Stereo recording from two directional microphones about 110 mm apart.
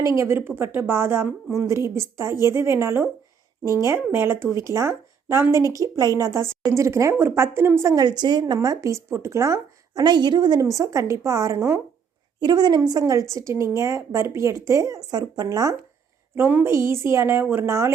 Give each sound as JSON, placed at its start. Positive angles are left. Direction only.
{"t": 0.0, "sound": "a woman's voice", "side_deg": -25}
{"t": 8.0, "sound": "a woman's voice", "side_deg": -40}
{"t": 8.5, "sound": "a woman's voice", "side_deg": -30}
{"t": 10.6, "sound": "a woman's voice", "side_deg": -30}
{"t": 12.4, "sound": "a woman's voice", "side_deg": -40}
{"t": 16.3, "sound": "a woman's voice", "side_deg": -20}